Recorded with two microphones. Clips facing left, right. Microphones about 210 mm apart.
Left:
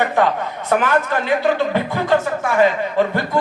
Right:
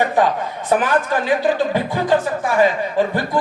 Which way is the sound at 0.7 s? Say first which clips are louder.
Even; 15° right (ahead or behind).